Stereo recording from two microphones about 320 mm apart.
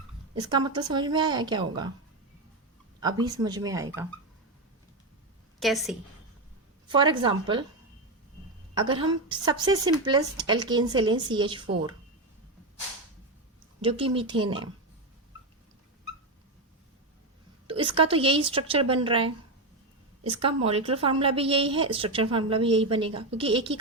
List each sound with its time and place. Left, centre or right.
0.4 s a woman's voice: centre
3.0 s a woman's voice: centre
5.5 s a woman's voice: centre
6.8 s a woman's voice: centre
8.7 s a woman's voice: centre
13.8 s a woman's voice: centre
17.7 s a woman's voice: centre